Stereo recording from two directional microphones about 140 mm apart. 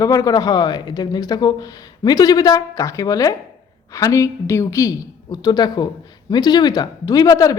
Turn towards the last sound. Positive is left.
turn(degrees=25)  # may be behind; listen again after turning